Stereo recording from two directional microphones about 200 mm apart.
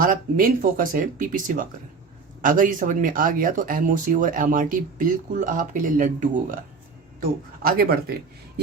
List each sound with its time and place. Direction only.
0.0 s speech: 45° right (ahead or behind)